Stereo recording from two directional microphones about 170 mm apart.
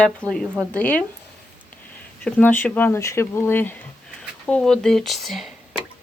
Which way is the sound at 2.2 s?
10° left (ahead or behind).